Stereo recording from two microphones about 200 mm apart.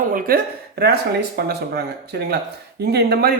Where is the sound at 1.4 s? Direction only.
55° right (ahead or behind).